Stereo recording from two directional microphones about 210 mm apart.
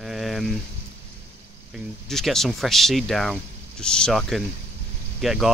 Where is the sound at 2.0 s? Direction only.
Centre (ahead or behind).